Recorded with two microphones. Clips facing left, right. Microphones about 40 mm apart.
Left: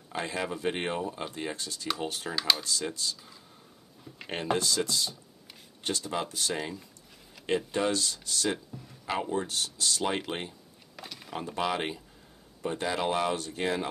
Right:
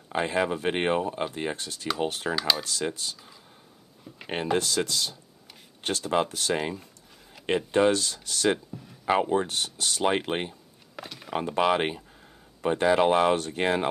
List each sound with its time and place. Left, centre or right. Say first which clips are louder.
0.1 s speech: right 7 dB; right
1.6 s speech: right 1 dB; right
2.3 s speech: even; centre
2.6 s speech: right 3 dB; right
2.9 s speech: even; right
4.6 s speech: right 2 dB; right
5.8 s speech: right 3 dB; right
6.5 s speech: right 6 dB; right
7.9 s speech: right 4 dB; right
9.0 s speech: right 7 dB; right
11.0 s speech: right 4 dB; centre
11.2 s speech: right 7 dB; right